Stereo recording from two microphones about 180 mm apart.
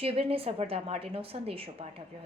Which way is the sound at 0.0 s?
30° right (ahead or behind).